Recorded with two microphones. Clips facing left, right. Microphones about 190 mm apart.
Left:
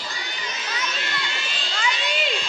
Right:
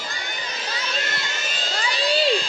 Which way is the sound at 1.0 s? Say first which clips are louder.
Right 1 dB; 45° right (ahead or behind).